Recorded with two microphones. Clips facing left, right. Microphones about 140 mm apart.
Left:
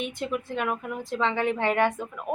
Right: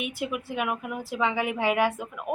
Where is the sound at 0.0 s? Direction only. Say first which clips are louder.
Left 1 dB; 5° right (ahead or behind).